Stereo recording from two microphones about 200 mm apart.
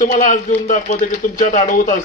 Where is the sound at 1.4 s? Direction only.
40° left (ahead or behind).